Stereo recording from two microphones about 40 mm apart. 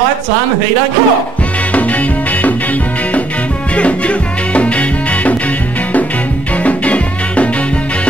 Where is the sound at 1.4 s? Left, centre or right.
Left.